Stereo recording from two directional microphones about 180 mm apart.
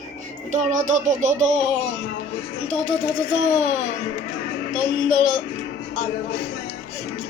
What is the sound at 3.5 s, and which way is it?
Speech, 35° right (ahead or behind).